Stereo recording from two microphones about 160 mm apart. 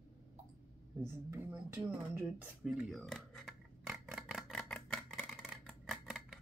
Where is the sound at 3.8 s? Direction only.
5° right (ahead or behind).